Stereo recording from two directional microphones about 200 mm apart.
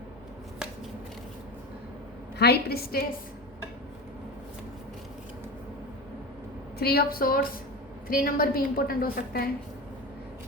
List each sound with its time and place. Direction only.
2.4 s a woman's voice: 50° left (ahead or behind)
6.7 s a woman's voice: 50° left (ahead or behind)